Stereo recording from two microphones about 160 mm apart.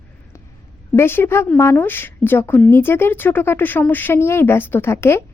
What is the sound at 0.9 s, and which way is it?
Speech, 15° left (ahead or behind).